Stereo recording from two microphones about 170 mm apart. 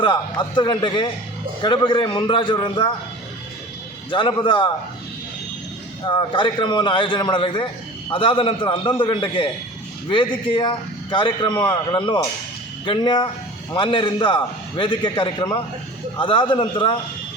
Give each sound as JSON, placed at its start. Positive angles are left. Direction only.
{"t": 0.0, "sound": "a man's voice", "side_deg": 25}
{"t": 4.1, "sound": "a man's voice", "side_deg": 30}
{"t": 6.1, "sound": "a man's voice", "side_deg": 30}